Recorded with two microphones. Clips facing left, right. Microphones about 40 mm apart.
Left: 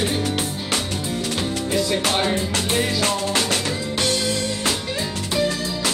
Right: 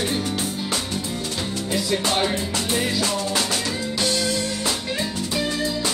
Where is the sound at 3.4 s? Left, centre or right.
Left.